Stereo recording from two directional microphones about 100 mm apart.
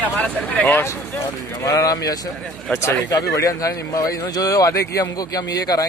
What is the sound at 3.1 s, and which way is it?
Speech, 35° left (ahead or behind).